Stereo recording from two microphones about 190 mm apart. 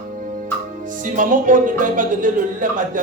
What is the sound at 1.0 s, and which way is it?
A man's voice, 45° right (ahead or behind).